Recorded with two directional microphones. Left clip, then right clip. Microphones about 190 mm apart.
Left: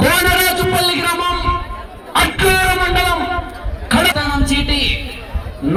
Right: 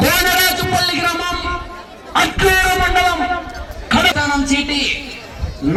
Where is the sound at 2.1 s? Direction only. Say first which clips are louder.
Even; 40° left (ahead or behind).